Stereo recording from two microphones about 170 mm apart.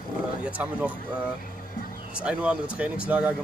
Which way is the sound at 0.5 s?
10° right (ahead or behind).